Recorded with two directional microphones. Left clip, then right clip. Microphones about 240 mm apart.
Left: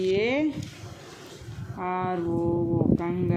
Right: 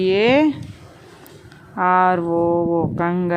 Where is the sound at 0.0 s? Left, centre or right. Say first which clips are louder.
Right 9 dB; right.